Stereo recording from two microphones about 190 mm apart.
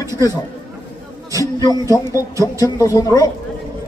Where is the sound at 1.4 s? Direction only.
20° left (ahead or behind).